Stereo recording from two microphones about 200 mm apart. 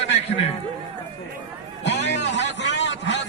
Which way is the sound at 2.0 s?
60° left (ahead or behind).